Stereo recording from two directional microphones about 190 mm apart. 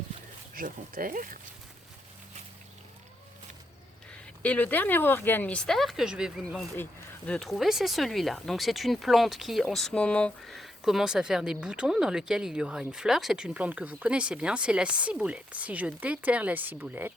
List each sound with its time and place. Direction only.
0.5 s speech: 45° right (ahead or behind)
4.4 s speech: 10° left (ahead or behind); by 17.1 s 10° right (ahead or behind)